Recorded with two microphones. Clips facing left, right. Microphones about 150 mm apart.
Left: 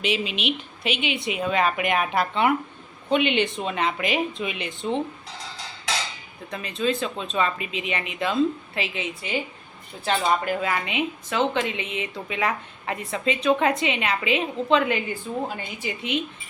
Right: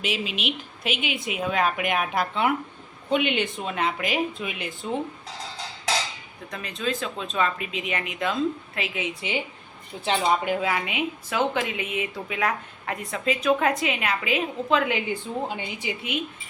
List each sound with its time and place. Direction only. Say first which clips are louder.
0.0 s a woman's voice: left 3 dB; centre (ahead or behind)
6.5 s a woman's voice: left 4 dB; centre (ahead or behind)
10.0 s speech: even; 20° right (ahead or behind)
10.7 s a woman's voice: left 1 dB; 5° right (ahead or behind)